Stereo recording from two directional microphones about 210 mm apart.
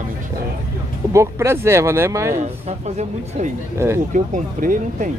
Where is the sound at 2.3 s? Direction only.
35° right (ahead or behind).